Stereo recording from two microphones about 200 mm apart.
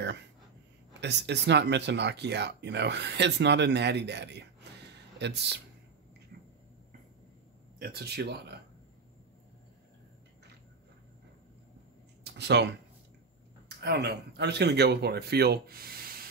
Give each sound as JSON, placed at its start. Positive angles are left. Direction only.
{"t": 1.0, "sound": "speech", "side_deg": -60}
{"t": 7.8, "sound": "speech", "side_deg": -55}
{"t": 12.2, "sound": "speech", "side_deg": -55}
{"t": 13.7, "sound": "speech", "side_deg": -55}